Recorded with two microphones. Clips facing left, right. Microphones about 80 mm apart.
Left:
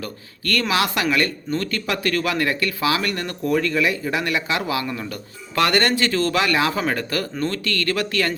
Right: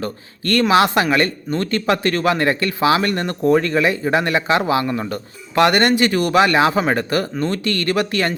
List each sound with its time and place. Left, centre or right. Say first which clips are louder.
0.0 s speech: right 5 dB; right